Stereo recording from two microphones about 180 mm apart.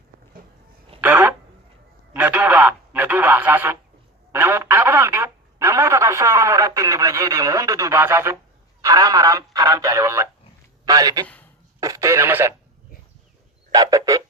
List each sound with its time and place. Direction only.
1.0 s a sound: 10° right (ahead or behind)
2.1 s radio: 10° right (ahead or behind)
4.3 s speech: 10° right (ahead or behind)
13.7 s goose: 20° right (ahead or behind)